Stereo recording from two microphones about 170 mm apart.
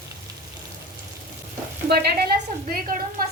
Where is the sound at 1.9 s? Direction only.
70° right (ahead or behind).